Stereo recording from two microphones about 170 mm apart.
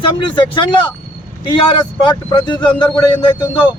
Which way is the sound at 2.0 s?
25° left (ahead or behind).